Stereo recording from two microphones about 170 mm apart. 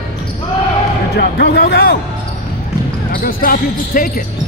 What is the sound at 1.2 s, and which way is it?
Speech, 75° left (ahead or behind).